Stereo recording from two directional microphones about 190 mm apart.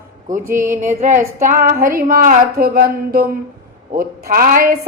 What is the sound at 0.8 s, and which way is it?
Female singing, 40° right (ahead or behind).